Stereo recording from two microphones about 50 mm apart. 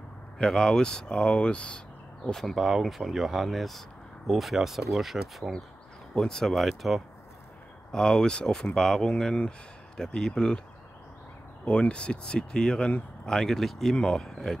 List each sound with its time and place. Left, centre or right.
0.4 s speech: centre
2.3 s speech: centre
2.6 s speech: centre
6.1 s speech: centre
11.6 s speech: left